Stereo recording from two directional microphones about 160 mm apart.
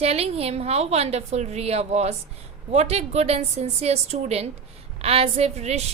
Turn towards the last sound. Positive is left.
turn(degrees=-45)  # may be behind; listen again after turning